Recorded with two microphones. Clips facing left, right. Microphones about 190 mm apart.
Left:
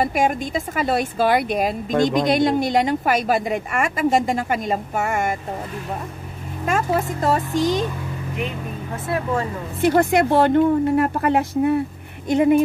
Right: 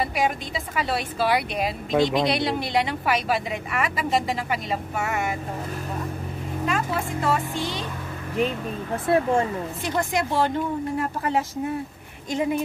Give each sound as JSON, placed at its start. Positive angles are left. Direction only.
{"t": 0.0, "sound": "a woman's voice", "side_deg": 50}
{"t": 6.6, "sound": "speech", "side_deg": 45}
{"t": 9.1, "sound": "speech", "side_deg": -25}
{"t": 9.8, "sound": "speech", "side_deg": 60}